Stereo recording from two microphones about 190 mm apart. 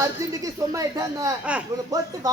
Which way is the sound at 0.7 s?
15° right (ahead or behind).